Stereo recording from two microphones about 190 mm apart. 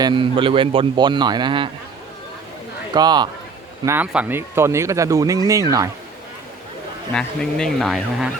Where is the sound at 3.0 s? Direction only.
20° right (ahead or behind).